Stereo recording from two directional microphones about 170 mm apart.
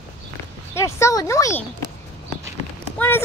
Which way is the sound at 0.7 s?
15° left (ahead or behind).